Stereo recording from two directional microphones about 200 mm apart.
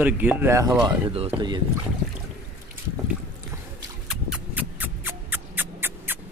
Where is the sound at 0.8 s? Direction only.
30° right (ahead or behind).